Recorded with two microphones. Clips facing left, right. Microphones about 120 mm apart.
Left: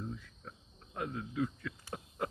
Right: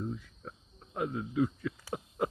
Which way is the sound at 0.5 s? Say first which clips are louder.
Right 5 dB; 20° right (ahead or behind).